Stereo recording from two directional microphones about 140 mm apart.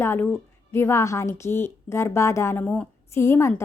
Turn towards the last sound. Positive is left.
turn(degrees=20)  # may be behind; listen again after turning